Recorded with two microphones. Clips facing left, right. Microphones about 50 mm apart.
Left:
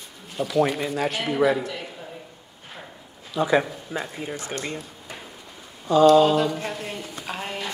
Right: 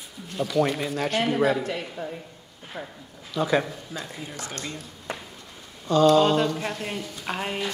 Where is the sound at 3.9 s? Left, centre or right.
Left.